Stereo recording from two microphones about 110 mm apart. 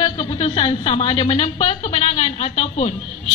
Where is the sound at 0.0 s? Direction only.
45° left (ahead or behind).